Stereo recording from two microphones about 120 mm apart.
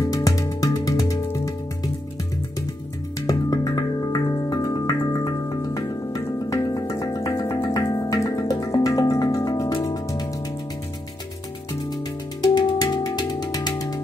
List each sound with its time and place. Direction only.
0.1 s music: 30° left (ahead or behind)
3.2 s music: 30° left (ahead or behind)
11.8 s music: 35° left (ahead or behind)